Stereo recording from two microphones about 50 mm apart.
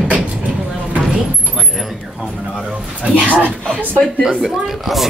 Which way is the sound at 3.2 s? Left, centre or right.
Centre.